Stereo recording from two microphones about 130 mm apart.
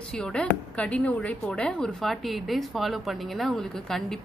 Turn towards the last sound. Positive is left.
turn(degrees=5)  # may be behind; listen again after turning